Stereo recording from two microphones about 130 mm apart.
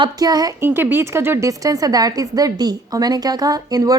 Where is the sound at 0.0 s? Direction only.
30° right (ahead or behind).